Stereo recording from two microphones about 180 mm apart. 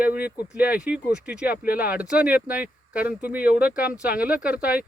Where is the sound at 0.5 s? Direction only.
10° right (ahead or behind).